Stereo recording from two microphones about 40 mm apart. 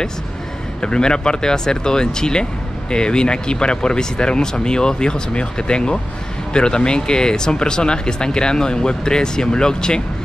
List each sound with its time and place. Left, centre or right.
0.7 s speech: left